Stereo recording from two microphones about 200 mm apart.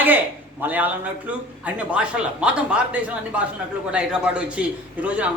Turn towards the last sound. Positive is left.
turn(degrees=-5)  # may be behind; listen again after turning